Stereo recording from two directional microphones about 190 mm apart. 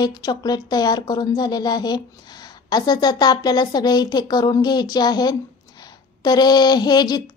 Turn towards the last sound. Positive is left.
turn(degrees=20)  # may be behind; listen again after turning